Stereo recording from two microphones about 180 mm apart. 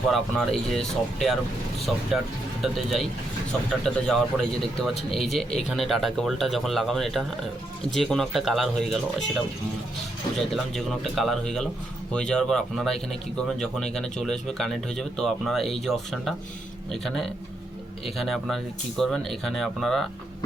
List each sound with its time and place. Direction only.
0.1 s speech: centre (ahead or behind)